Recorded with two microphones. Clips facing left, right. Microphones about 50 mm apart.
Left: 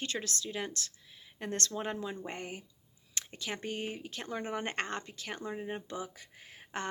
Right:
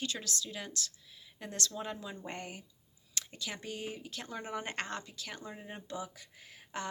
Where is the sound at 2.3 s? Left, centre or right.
Left.